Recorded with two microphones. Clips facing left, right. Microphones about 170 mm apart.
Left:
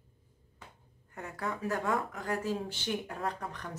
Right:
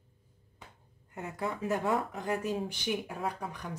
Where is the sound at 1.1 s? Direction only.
20° right (ahead or behind).